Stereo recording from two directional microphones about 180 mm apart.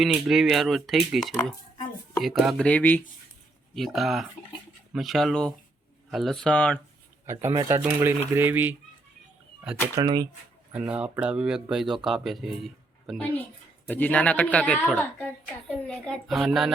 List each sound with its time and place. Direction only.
0.0 s speech: centre (ahead or behind)
7.3 s speech: 15° right (ahead or behind)
9.9 s speech: 20° right (ahead or behind)
10.8 s speech: 5° right (ahead or behind)